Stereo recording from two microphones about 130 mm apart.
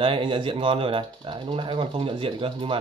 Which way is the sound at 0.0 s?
40° right (ahead or behind).